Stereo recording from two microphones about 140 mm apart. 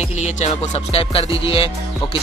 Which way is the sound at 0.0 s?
55° left (ahead or behind).